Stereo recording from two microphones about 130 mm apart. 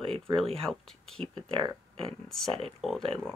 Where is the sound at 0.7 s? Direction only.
5° left (ahead or behind).